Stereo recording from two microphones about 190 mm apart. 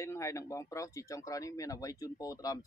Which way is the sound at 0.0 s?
15° left (ahead or behind).